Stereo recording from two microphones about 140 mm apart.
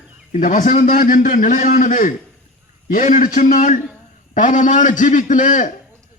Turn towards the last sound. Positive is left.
turn(degrees=65)  # may be behind; listen again after turning